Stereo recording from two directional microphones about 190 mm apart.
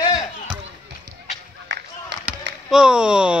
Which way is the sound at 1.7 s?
65° right (ahead or behind).